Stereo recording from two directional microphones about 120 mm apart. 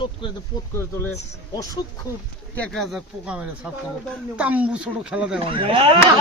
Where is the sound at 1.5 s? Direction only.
30° left (ahead or behind).